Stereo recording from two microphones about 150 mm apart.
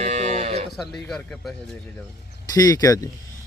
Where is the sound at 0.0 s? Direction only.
50° right (ahead or behind).